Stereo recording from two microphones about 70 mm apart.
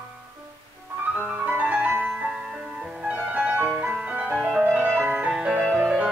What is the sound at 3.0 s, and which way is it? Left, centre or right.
Music, centre.